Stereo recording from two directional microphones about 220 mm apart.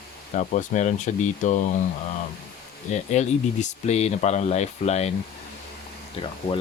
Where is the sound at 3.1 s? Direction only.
30° left (ahead or behind).